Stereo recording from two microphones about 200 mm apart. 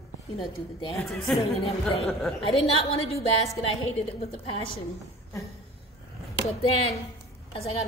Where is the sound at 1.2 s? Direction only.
Centre (ahead or behind).